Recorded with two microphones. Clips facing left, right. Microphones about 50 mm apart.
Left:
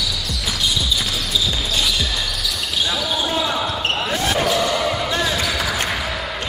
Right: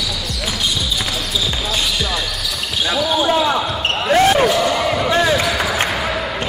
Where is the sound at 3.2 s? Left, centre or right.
Right.